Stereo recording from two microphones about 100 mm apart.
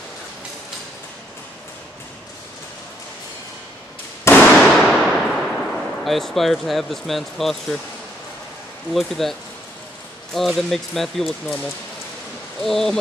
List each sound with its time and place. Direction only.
4.2 s fireworks: 20° left (ahead or behind)
4.5 s a sound: centre (ahead or behind)
8.9 s speech: 5° left (ahead or behind)
12.6 s speech: 5° left (ahead or behind)